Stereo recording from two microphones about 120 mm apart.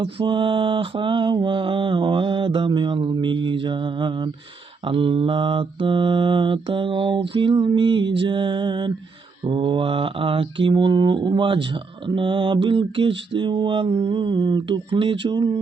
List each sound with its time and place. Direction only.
0.0 s mantra: 45° right (ahead or behind)